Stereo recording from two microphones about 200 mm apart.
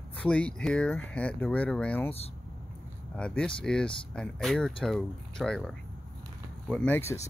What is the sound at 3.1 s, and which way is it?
Speech, 5° left (ahead or behind).